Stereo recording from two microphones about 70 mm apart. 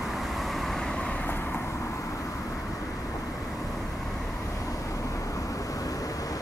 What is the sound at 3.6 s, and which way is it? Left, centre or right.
Vehicle, centre.